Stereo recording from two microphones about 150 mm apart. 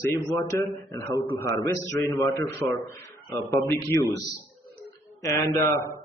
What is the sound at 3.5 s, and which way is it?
Speech, 20° left (ahead or behind).